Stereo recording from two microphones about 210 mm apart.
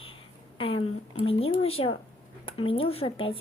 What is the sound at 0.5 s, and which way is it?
A woman's voice, 25° left (ahead or behind).